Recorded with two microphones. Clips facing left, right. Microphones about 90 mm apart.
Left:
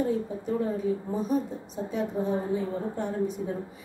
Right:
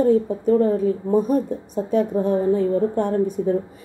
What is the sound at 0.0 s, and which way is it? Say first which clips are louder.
A woman's voice: right 11 dB; 70° right (ahead or behind).